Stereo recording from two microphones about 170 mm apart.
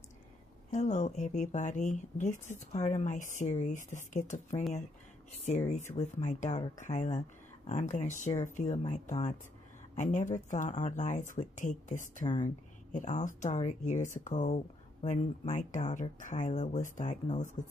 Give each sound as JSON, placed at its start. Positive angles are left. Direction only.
{"t": 0.7, "sound": "speech", "side_deg": 45}
{"t": 5.7, "sound": "speech", "side_deg": 45}